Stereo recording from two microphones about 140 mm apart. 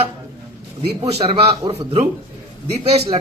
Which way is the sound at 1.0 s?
45° right (ahead or behind).